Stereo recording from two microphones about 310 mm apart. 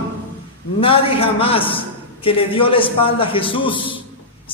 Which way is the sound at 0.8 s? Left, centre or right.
Centre.